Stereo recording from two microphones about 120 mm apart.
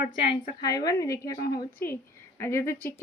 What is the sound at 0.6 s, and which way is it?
Speech, 30° left (ahead or behind).